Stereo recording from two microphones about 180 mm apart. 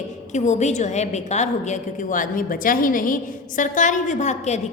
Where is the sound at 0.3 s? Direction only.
40° left (ahead or behind).